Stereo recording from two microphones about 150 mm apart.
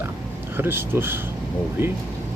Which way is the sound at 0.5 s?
15° right (ahead or behind).